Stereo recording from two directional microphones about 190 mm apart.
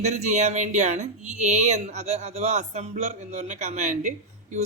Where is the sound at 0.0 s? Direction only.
35° right (ahead or behind).